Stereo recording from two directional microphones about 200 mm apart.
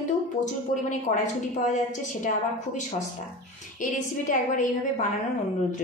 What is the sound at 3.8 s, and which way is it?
A woman's voice, 40° left (ahead or behind).